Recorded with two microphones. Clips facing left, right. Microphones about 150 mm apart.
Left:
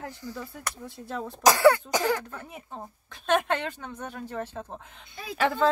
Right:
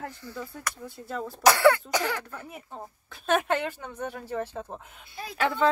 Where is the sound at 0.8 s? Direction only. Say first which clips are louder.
Even; centre (ahead or behind).